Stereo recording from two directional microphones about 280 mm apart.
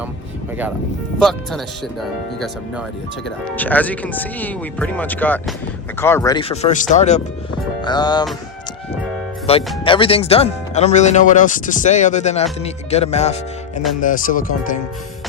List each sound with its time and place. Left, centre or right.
1.2 s speech: centre
9.5 s speech: left